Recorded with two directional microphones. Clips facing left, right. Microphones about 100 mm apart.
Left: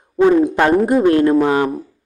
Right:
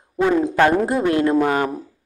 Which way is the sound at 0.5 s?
15° left (ahead or behind).